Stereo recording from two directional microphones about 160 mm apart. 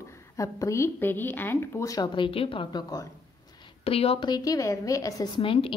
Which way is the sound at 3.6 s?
35° left (ahead or behind).